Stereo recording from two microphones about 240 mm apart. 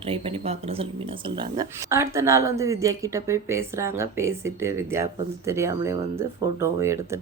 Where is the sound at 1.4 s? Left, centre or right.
Centre.